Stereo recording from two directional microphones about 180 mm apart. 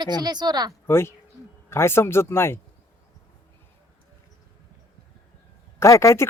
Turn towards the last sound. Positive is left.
turn(degrees=15)  # may be behind; listen again after turning